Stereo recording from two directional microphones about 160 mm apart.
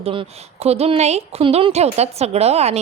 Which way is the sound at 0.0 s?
35° right (ahead or behind).